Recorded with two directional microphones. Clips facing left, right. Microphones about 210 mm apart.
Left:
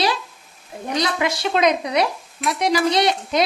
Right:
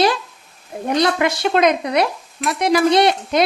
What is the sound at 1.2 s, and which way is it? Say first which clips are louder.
Speech: right 3 dB; 55° right (ahead or behind).